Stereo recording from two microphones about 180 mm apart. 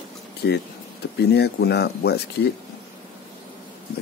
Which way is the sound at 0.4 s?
65° left (ahead or behind).